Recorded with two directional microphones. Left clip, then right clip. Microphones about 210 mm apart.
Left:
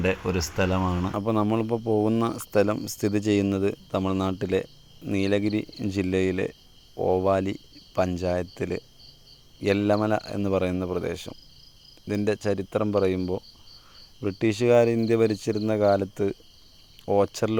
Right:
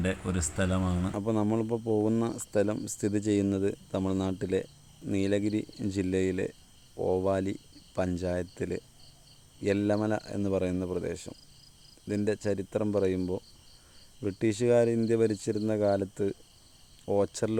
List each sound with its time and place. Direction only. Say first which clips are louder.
0.0 s speech: left 7 dB; 10° left (ahead or behind)